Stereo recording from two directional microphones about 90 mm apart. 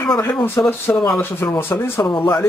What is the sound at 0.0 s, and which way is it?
Speech, 25° left (ahead or behind).